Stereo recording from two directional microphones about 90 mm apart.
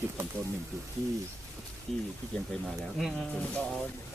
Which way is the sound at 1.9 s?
5° left (ahead or behind).